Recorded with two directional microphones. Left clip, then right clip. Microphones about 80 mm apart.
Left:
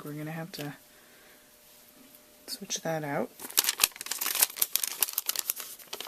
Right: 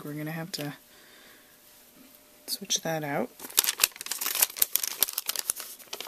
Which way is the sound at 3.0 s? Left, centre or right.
Right.